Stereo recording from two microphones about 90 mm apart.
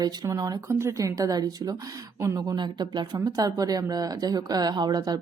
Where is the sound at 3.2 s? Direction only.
45° right (ahead or behind).